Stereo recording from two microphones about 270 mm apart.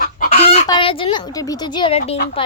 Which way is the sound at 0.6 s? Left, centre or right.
Centre.